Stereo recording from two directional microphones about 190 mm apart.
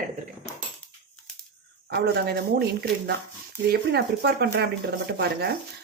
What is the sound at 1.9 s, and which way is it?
Speech, 55° right (ahead or behind).